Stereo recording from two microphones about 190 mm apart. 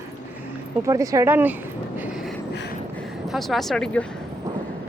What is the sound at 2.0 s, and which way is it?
Vehicle, 5° right (ahead or behind).